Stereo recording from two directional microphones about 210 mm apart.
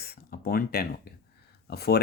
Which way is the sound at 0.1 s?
45° left (ahead or behind).